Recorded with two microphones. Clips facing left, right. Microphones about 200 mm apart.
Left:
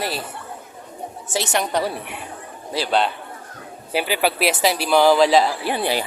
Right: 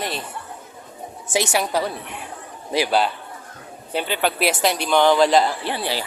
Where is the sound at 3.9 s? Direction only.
5° left (ahead or behind).